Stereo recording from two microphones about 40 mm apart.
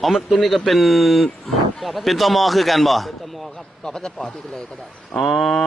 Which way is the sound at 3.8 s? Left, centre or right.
Centre.